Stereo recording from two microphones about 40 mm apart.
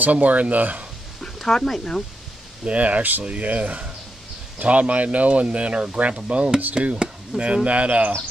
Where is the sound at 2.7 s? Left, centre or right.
Right.